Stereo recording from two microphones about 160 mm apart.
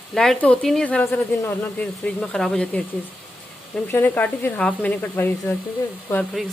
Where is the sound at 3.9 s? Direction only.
10° left (ahead or behind).